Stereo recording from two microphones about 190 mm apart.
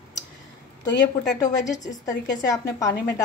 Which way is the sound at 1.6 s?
20° left (ahead or behind).